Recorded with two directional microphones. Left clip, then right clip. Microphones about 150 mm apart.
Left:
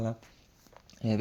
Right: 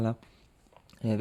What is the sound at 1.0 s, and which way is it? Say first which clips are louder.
Speech: even; 15° right (ahead or behind).